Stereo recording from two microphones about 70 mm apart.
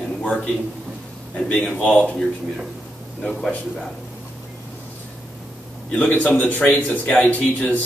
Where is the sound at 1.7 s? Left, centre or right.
Left.